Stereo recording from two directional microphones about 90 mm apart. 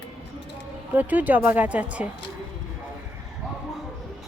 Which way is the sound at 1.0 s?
20° right (ahead or behind).